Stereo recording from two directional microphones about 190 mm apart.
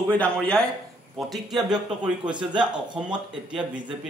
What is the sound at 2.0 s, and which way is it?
Speech, 25° right (ahead or behind).